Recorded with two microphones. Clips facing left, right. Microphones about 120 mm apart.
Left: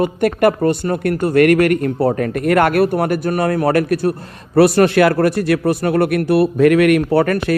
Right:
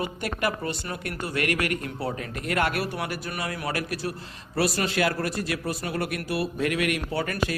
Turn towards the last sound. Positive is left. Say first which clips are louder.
# left 13 dB
turn(degrees=60)  # may be behind; listen again after turning